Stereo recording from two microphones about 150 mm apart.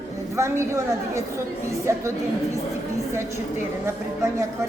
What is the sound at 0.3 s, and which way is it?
Speech, 20° right (ahead or behind).